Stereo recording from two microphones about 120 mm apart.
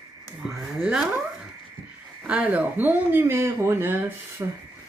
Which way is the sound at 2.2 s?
10° right (ahead or behind).